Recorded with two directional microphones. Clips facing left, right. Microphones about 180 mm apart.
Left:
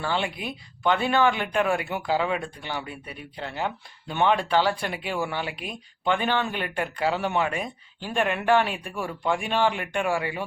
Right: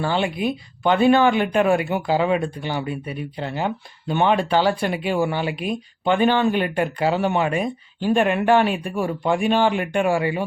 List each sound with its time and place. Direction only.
0.1 s speech: 20° right (ahead or behind)